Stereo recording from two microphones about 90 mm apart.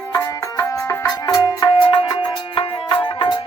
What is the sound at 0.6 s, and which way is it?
Music, 35° left (ahead or behind).